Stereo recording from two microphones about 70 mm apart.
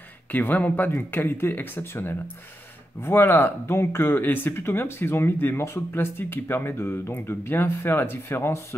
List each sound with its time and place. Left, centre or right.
0.3 s speech: left